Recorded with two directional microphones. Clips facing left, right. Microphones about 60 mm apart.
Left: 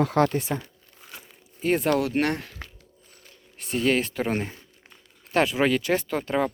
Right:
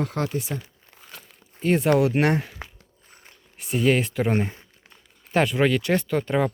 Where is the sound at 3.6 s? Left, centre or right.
Centre.